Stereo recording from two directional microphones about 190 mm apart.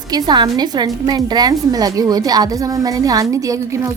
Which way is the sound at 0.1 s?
20° right (ahead or behind).